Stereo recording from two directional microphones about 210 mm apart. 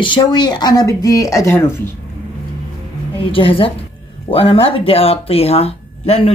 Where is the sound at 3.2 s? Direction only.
25° left (ahead or behind).